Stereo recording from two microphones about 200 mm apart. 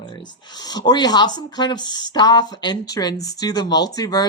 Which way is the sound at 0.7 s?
20° left (ahead or behind).